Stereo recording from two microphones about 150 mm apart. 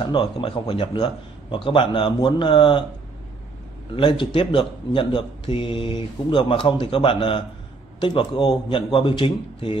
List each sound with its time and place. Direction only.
0.0 s speech: 30° left (ahead or behind)
3.9 s speech: 35° left (ahead or behind)